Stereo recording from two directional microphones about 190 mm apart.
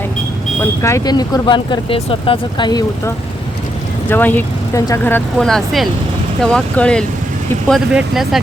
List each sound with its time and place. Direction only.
0.6 s speech: 15° left (ahead or behind)
4.1 s speech: 10° left (ahead or behind)